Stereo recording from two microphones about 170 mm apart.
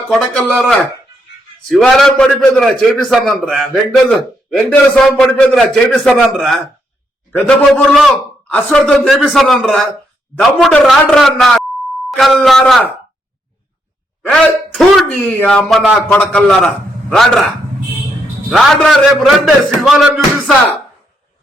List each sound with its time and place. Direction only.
0.1 s a man's voice: centre (ahead or behind)
14.2 s a man's voice: centre (ahead or behind)
18.5 s a man's voice: 5° left (ahead or behind)